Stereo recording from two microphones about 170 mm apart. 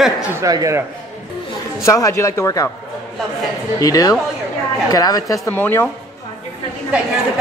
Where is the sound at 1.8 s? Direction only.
20° left (ahead or behind).